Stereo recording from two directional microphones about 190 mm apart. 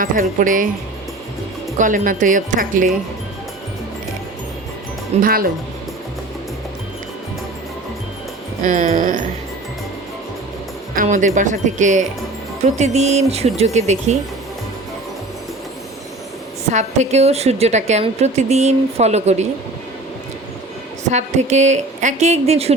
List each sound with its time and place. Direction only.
0.0 s speech: 45° right (ahead or behind)
1.8 s speech: 45° right (ahead or behind)
5.2 s speech: 50° right (ahead or behind)
8.6 s speech: 45° right (ahead or behind)
10.9 s a woman's voice: 40° right (ahead or behind)
16.7 s a woman's voice: 35° right (ahead or behind)
21.1 s a woman's voice: 35° right (ahead or behind)